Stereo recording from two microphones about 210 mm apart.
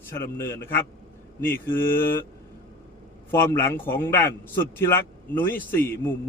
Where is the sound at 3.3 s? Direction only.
10° left (ahead or behind).